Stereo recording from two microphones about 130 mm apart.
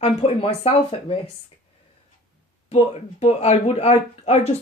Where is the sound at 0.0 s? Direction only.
50° left (ahead or behind).